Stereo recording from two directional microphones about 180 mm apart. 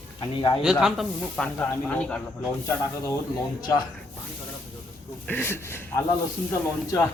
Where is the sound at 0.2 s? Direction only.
25° left (ahead or behind).